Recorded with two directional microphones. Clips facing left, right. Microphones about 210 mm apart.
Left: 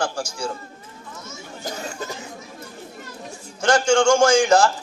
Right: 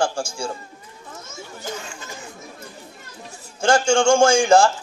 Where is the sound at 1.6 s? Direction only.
40° left (ahead or behind).